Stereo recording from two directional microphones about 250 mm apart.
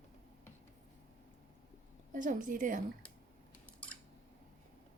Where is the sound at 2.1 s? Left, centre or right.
Right.